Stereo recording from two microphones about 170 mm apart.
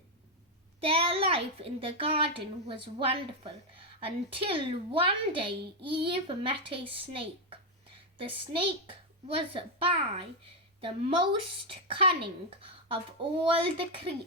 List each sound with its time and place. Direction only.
0.8 s a woman's voice: 30° right (ahead or behind)
8.9 s a woman's voice: 35° right (ahead or behind)